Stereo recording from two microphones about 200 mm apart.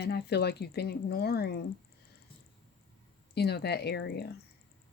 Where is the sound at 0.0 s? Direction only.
55° left (ahead or behind).